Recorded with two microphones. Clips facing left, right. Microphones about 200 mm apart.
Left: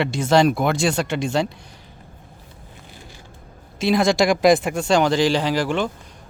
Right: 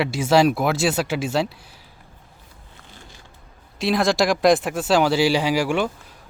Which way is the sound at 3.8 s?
Centre (ahead or behind).